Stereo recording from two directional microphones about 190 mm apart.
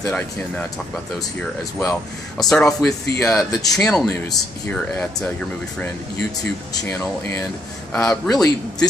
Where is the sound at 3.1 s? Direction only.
15° left (ahead or behind).